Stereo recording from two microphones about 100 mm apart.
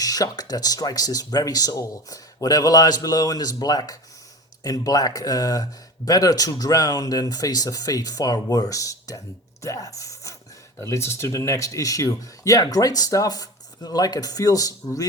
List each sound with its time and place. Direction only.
0.0 s speech: 40° left (ahead or behind)